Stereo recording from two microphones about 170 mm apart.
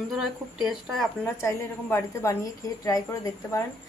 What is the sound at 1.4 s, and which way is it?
A woman's voice, 15° left (ahead or behind).